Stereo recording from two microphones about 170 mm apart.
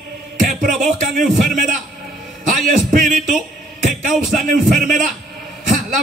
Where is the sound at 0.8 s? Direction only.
50° right (ahead or behind).